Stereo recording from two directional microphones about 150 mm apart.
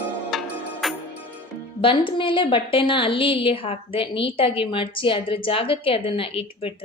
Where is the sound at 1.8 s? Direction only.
35° left (ahead or behind).